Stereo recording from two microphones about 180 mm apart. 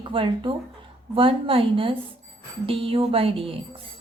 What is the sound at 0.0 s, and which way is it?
Speech, 25° right (ahead or behind).